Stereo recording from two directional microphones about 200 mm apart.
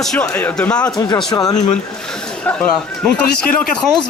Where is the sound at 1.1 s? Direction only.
20° left (ahead or behind).